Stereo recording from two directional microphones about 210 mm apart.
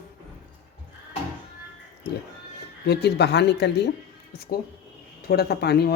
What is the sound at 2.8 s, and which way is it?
Speech, 50° left (ahead or behind).